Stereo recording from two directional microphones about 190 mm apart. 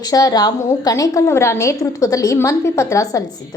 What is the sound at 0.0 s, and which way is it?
A woman's voice, 20° left (ahead or behind).